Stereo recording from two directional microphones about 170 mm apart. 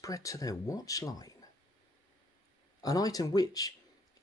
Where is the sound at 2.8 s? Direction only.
20° left (ahead or behind).